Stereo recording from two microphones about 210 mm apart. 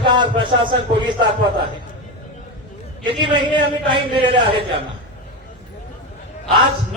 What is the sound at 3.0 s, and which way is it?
A man's voice, 20° right (ahead or behind).